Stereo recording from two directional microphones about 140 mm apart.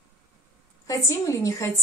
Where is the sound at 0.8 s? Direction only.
20° left (ahead or behind).